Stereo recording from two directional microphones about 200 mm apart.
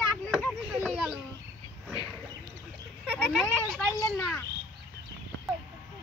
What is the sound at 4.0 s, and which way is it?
Speech, 10° left (ahead or behind).